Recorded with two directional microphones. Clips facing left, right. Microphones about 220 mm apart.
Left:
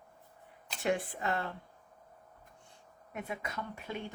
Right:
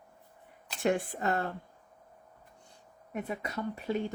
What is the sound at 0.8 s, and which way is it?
Speech, 50° right (ahead or behind).